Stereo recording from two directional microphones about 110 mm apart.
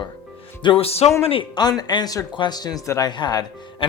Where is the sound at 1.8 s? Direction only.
40° left (ahead or behind).